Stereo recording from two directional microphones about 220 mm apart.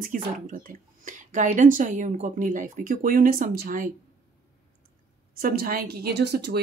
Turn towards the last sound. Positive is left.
turn(degrees=-50)  # may be behind; listen again after turning